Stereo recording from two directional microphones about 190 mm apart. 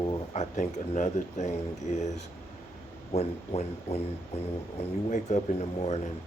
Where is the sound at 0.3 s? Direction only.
40° left (ahead or behind).